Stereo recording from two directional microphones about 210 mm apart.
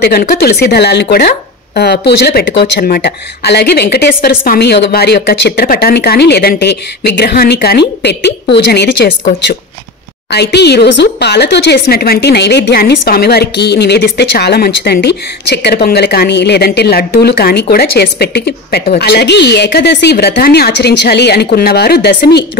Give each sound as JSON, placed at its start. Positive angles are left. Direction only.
{"t": 0.0, "sound": "speech", "side_deg": 45}
{"t": 10.3, "sound": "speech", "side_deg": 50}